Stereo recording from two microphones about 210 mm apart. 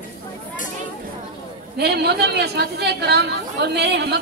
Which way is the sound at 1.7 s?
50° right (ahead or behind).